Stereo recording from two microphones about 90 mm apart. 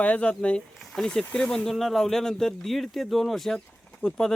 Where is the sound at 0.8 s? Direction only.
5° left (ahead or behind).